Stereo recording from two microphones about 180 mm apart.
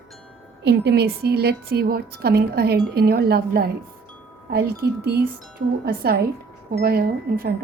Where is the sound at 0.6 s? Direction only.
65° right (ahead or behind).